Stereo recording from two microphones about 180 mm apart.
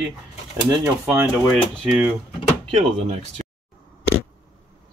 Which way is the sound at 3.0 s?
35° right (ahead or behind).